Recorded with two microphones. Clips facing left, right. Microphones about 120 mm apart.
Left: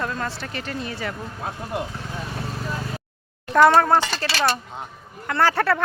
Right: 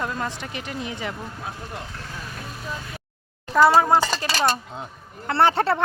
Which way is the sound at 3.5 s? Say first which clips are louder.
Left 1 dB; 5° right (ahead or behind).